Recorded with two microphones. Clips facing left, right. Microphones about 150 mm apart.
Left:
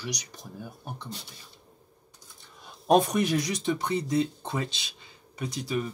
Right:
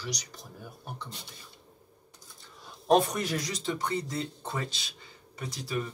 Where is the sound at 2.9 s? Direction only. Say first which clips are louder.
Left 2 dB; 15° left (ahead or behind).